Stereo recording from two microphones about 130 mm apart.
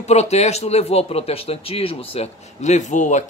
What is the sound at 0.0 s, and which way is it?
Speech, 55° left (ahead or behind).